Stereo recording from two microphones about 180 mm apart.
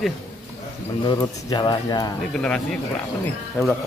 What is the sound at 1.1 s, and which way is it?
Speech, 20° left (ahead or behind).